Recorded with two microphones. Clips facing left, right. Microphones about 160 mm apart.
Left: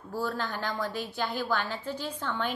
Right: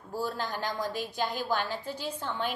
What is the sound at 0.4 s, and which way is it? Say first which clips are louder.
A woman's voice: even; 15° right (ahead or behind).